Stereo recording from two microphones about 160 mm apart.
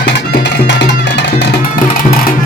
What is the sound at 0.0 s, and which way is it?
Music, 90° left.